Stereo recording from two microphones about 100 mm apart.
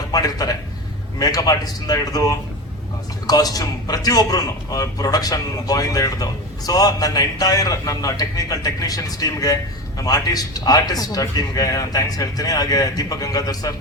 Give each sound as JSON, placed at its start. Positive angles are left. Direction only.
{"t": 0.1, "sound": "a man's voice", "side_deg": 40}